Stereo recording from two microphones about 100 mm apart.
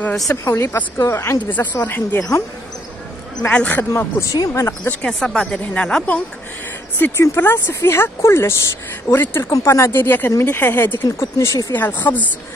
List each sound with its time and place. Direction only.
0.3 s a woman's voice: 25° left (ahead or behind)
3.4 s speech: 15° left (ahead or behind)
4.2 s speech: 35° left (ahead or behind)
4.8 s speech: 10° left (ahead or behind)
7.0 s a woman's voice: 20° left (ahead or behind)
11.1 s speech: 30° left (ahead or behind)
11.7 s speech: 15° left (ahead or behind)